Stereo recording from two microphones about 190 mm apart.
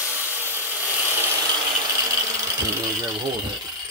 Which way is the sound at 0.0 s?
10° right (ahead or behind).